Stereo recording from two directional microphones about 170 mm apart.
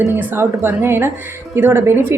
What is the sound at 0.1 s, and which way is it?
A woman's voice, 10° right (ahead or behind).